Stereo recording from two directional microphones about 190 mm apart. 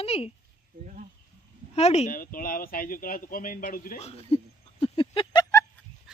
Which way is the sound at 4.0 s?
30° left (ahead or behind).